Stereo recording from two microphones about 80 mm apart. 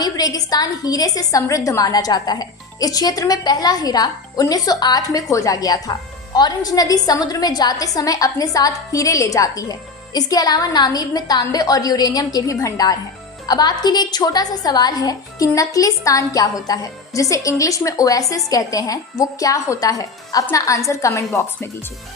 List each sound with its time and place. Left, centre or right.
0.0 s a woman's voice: left